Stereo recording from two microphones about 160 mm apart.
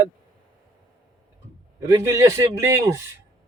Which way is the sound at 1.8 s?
20° right (ahead or behind).